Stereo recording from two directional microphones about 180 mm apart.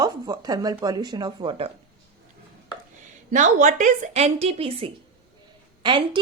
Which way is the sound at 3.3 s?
45° right (ahead or behind).